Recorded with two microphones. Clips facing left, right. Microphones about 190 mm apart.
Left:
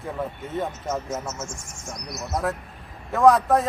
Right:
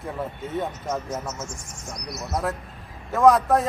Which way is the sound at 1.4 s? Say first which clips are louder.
Even; 25° left (ahead or behind).